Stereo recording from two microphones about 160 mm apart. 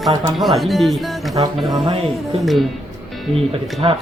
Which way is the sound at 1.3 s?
25° right (ahead or behind).